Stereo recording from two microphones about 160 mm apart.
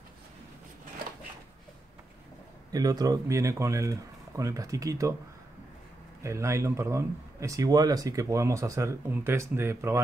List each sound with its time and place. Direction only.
2.7 s speech: 25° right (ahead or behind)
6.2 s speech: 20° right (ahead or behind)